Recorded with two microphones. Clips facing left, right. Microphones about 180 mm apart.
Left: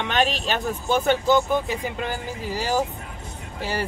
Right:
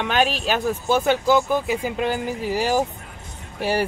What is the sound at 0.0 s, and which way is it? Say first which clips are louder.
A man's voice: right 2 dB; 5° right (ahead or behind).